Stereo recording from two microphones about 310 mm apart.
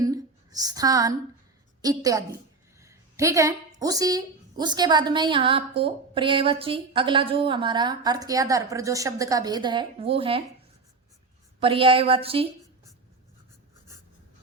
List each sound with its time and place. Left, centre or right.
0.0 s a sound: centre
1.8 s a woman's voice: centre
11.6 s a woman's voice: centre